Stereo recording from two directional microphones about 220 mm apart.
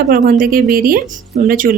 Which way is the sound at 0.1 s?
40° right (ahead or behind).